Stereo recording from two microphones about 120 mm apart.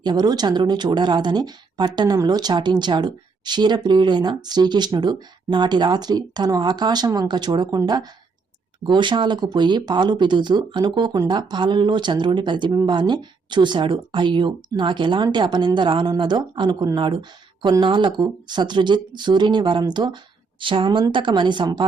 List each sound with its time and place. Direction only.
0.0 s speech: 35° right (ahead or behind)